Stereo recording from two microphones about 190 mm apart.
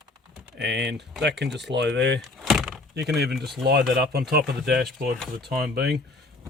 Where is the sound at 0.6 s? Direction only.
65° right (ahead or behind).